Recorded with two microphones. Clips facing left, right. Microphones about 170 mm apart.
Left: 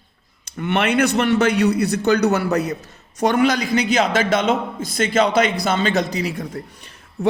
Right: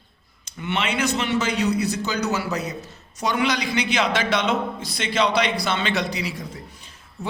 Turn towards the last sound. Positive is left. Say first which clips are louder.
# left 7 dB
turn(degrees=60)  # may be behind; listen again after turning